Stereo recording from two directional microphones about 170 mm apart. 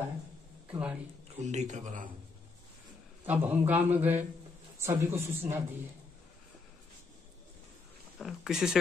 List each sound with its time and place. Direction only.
0.7 s speech: 5° right (ahead or behind)
1.4 s speech: 45° right (ahead or behind)
3.3 s a man's voice: 10° right (ahead or behind)
8.2 s speech: 5° right (ahead or behind)